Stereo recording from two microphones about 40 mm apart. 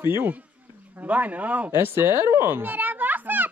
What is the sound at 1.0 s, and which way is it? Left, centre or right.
Speech, right.